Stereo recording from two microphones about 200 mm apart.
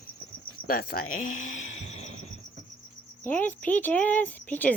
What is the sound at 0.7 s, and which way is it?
Speech, 50° left (ahead or behind).